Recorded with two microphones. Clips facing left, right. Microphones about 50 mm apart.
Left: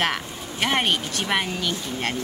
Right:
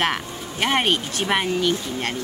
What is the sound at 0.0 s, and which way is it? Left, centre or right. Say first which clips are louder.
Speech: right 2 dB; centre.